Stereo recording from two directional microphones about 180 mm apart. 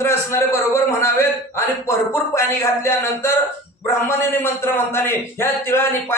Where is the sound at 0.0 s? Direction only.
15° left (ahead or behind).